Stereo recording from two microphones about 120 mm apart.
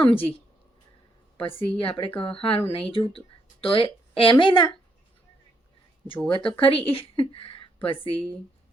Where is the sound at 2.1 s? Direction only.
50° left (ahead or behind).